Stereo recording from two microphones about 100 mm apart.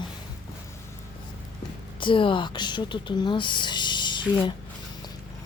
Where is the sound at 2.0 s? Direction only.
55° left (ahead or behind).